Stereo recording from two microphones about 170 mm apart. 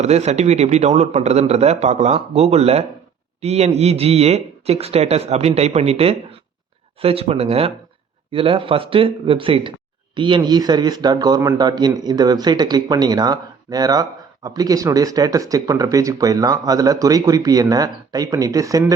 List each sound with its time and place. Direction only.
0.0 s a man's voice: 40° right (ahead or behind); by 18.9 s 20° right (ahead or behind)